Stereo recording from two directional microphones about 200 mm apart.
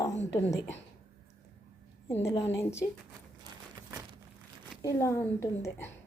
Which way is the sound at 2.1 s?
15° left (ahead or behind).